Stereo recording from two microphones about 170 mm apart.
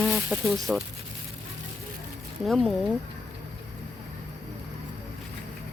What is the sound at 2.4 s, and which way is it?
Speech, centre (ahead or behind).